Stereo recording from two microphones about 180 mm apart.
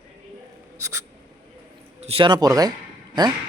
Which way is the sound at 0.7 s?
15° right (ahead or behind).